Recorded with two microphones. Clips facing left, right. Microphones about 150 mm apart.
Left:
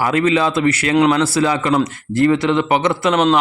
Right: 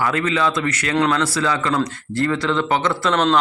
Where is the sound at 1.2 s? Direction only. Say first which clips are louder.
Left 4 dB; 25° left (ahead or behind).